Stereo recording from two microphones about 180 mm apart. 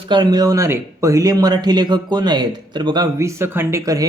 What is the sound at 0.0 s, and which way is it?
Speech, 25° right (ahead or behind).